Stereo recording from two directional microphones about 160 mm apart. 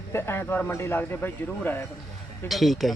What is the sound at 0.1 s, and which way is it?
A man's voice, 15° left (ahead or behind).